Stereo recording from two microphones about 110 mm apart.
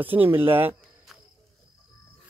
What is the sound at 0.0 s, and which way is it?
Speech, 15° right (ahead or behind).